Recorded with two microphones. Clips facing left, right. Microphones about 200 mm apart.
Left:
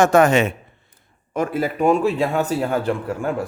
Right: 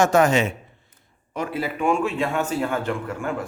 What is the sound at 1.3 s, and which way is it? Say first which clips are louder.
Speech: left 5 dB; 45° left (ahead or behind).